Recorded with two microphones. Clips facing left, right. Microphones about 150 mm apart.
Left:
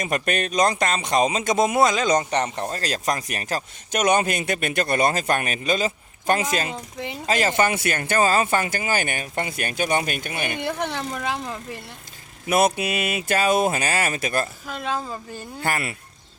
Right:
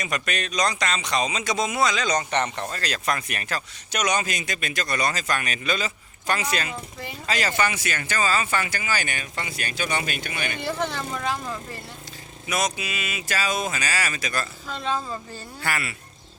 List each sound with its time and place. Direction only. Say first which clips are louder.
0.0 s speech: left 5 dB; 50° left (ahead or behind)
10.4 s speech: left 1 dB; 15° left (ahead or behind)
12.5 s speech: left 7 dB; 55° left (ahead or behind)
14.7 s speech: even; 10° left (ahead or behind)
15.6 s speech: left 3 dB; 45° left (ahead or behind)